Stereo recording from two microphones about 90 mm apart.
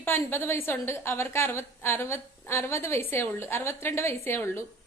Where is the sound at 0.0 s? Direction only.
25° left (ahead or behind).